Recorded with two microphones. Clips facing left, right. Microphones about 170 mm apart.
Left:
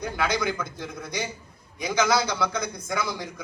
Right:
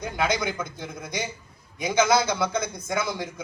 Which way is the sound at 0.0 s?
20° right (ahead or behind).